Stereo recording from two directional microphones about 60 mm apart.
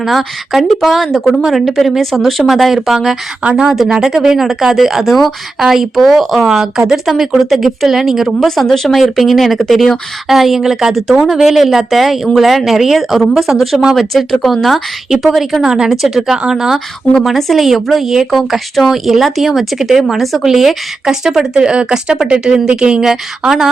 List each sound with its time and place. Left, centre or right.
0.0 s speech: centre
8.4 s speech: centre